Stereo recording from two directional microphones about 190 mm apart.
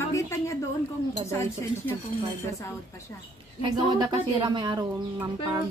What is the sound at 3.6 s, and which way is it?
Speech, 25° right (ahead or behind).